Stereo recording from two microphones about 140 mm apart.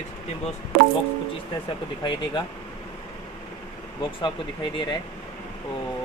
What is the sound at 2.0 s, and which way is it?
Speech, 35° left (ahead or behind).